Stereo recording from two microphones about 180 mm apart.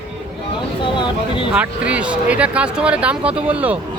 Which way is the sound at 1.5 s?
5° right (ahead or behind).